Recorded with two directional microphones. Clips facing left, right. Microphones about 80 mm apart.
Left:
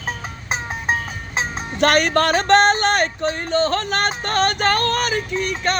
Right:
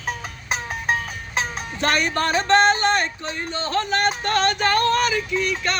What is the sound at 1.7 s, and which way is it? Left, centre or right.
Speech, left.